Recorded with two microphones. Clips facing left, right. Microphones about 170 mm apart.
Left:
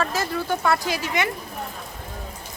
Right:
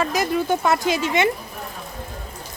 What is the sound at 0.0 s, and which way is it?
Speech, 15° right (ahead or behind).